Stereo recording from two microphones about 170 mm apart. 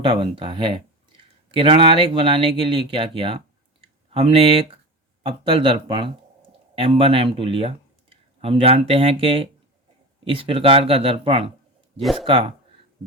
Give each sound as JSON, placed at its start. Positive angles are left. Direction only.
{"t": 0.0, "sound": "speech", "side_deg": -30}
{"t": 11.9, "sound": "speech", "side_deg": 0}
{"t": 12.2, "sound": "speech", "side_deg": -30}